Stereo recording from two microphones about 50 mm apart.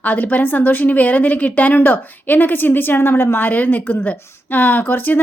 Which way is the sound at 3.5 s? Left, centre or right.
Left.